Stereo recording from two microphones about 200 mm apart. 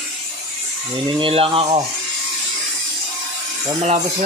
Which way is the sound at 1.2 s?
30° right (ahead or behind).